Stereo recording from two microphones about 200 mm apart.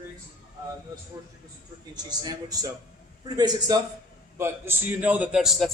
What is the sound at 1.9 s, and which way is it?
A man's voice, 20° right (ahead or behind).